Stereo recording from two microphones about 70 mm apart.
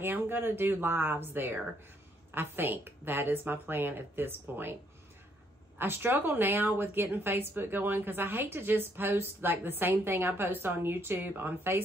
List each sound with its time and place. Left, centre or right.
0.0 s a woman's voice: right
5.8 s a woman's voice: right